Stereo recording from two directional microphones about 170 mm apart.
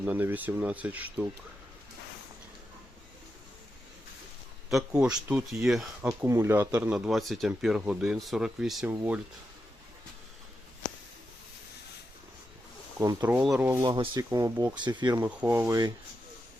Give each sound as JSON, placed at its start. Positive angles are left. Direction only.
{"t": 0.0, "sound": "speech", "side_deg": -10}
{"t": 4.9, "sound": "speech", "side_deg": -5}
{"t": 13.0, "sound": "speech", "side_deg": -15}
{"t": 13.8, "sound": "speech", "side_deg": -30}
{"t": 14.3, "sound": "speech", "side_deg": -15}